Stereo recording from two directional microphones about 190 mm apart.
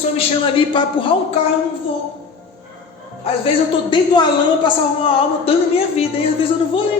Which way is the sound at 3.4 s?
25° left (ahead or behind).